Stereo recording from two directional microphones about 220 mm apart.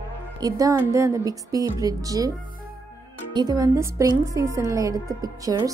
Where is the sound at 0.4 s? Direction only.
15° right (ahead or behind).